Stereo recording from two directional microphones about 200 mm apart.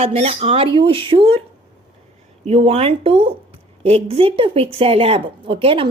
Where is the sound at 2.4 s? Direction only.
30° right (ahead or behind).